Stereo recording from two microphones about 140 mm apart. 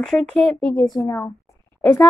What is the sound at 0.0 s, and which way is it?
Speech, 5° left (ahead or behind).